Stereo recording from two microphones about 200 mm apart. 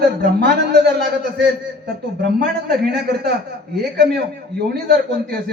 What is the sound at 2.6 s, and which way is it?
Speech, 55° right (ahead or behind).